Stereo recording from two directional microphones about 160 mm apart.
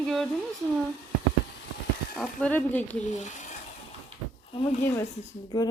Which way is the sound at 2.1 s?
10° left (ahead or behind).